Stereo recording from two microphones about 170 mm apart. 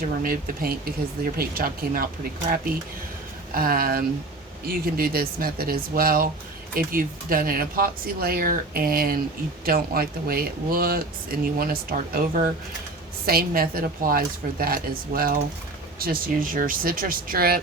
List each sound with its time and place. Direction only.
0.2 s speech: 60° right (ahead or behind)
3.5 s speech: 60° right (ahead or behind)